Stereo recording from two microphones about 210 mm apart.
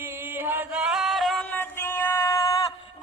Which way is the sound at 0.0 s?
10° right (ahead or behind).